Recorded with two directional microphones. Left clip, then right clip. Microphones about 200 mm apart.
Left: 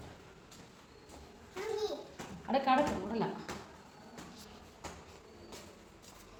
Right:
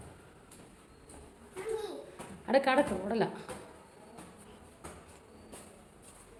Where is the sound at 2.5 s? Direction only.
55° right (ahead or behind).